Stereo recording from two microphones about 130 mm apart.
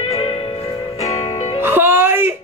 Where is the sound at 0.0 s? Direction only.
50° left (ahead or behind).